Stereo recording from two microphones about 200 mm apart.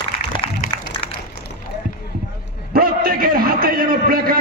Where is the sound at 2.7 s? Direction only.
50° right (ahead or behind).